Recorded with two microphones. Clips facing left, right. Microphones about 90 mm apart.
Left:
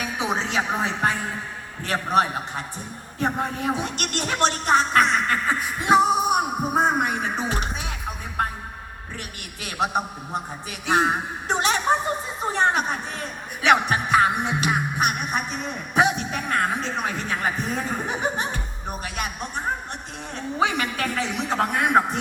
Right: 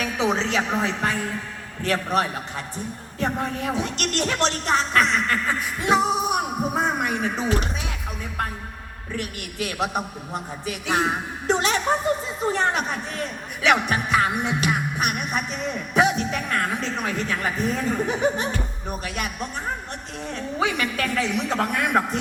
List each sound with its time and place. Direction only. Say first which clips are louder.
0.0 s a woman's voice: right 3 dB; 20° left (ahead or behind)
6.8 s music: left 1 dB; 25° left (ahead or behind)
8.4 s a sound: left 3 dB; 25° left (ahead or behind)
9.1 s a man's voice: right 11 dB; 25° left (ahead or behind)